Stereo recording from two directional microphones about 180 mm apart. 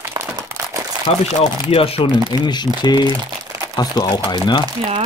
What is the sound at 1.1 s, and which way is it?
Speech, 30° left (ahead or behind).